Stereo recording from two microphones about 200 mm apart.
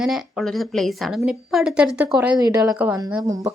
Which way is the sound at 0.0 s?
Centre (ahead or behind).